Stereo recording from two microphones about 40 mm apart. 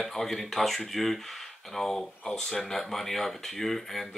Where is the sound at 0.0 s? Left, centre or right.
Centre.